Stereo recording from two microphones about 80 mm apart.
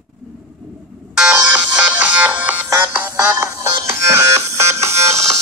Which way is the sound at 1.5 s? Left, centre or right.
Centre.